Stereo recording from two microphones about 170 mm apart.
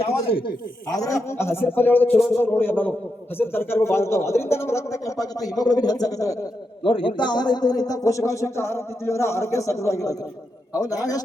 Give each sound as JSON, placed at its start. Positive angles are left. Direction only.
{"t": 0.0, "sound": "a man's voice", "side_deg": 30}